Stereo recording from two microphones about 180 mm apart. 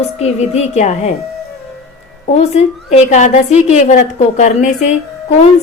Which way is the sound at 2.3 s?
40° left (ahead or behind).